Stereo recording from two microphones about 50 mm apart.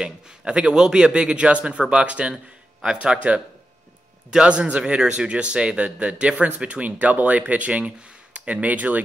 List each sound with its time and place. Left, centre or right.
0.0 s speech: centre
4.5 s speech: right